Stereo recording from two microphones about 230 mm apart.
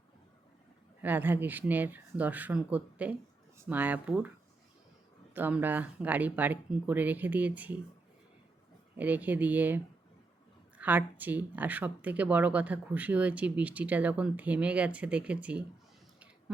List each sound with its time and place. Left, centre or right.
1.0 s speech: centre
5.3 s speech: centre
9.0 s speech: centre